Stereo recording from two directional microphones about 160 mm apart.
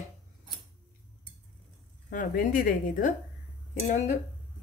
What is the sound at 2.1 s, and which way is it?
A woman's voice, 55° left (ahead or behind).